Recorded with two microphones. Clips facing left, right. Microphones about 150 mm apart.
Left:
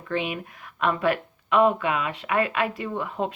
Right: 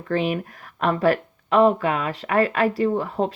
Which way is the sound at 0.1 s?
40° right (ahead or behind).